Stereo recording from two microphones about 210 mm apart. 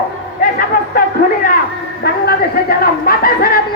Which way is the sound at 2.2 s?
45° left (ahead or behind).